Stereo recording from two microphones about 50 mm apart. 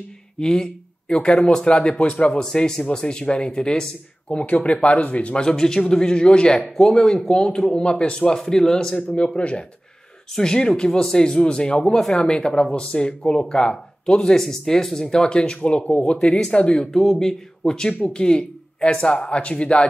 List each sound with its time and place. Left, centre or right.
0.4 s speech: centre
5.4 s speech: centre
9.1 s speech: left
14.4 s speech: centre; by 19.9 s left